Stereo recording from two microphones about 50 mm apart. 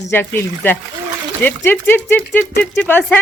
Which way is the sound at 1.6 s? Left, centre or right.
Left.